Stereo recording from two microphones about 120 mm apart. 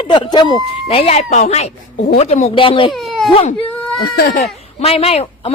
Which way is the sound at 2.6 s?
45° left (ahead or behind).